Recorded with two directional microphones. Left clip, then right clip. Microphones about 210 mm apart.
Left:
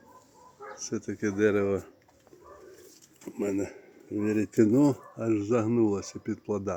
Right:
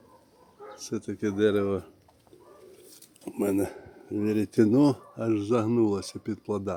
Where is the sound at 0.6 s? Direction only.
45° left (ahead or behind).